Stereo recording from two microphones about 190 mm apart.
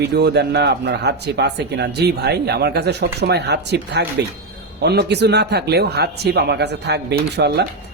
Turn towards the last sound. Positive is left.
turn(degrees=-60)  # may be behind; listen again after turning